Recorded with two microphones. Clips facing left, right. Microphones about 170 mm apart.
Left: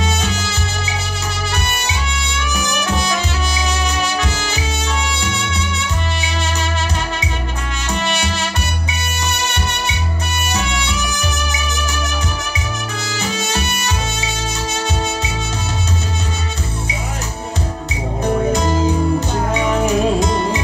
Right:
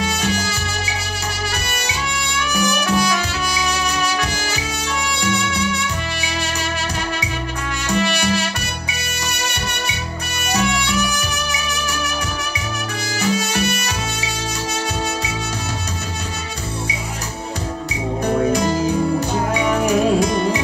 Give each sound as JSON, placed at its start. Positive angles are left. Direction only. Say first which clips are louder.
{"t": 0.0, "sound": "music", "louder": "even", "side_deg": 25}
{"t": 2.5, "sound": "music", "louder": "right 3 dB", "side_deg": 25}
{"t": 7.9, "sound": "music", "louder": "right 3 dB", "side_deg": 25}
{"t": 13.1, "sound": "music", "louder": "right 3 dB", "side_deg": 25}
{"t": 18.5, "sound": "music", "louder": "left 1 dB", "side_deg": 25}